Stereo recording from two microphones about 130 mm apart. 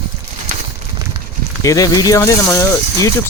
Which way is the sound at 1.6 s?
25° left (ahead or behind).